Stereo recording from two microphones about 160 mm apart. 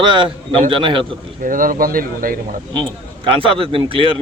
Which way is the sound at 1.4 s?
60° right (ahead or behind).